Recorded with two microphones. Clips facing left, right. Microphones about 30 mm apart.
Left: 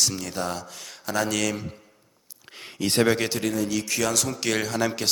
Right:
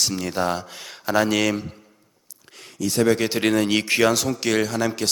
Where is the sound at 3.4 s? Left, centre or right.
Right.